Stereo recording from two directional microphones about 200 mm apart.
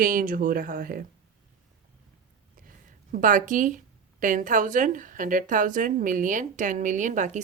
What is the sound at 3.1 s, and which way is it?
Speech, 40° right (ahead or behind).